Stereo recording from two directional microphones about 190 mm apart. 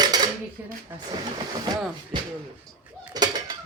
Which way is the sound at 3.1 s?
20° right (ahead or behind).